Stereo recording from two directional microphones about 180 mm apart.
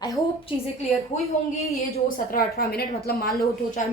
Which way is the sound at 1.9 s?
50° left (ahead or behind).